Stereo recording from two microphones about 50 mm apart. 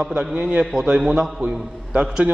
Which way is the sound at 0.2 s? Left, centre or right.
Centre.